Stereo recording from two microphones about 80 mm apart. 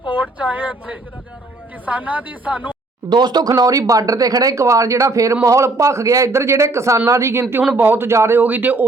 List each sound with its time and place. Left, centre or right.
0.1 s a woman's voice: centre
3.1 s a man's voice: right
7.7 s a woman's voice: right
8.4 s a woman's voice: right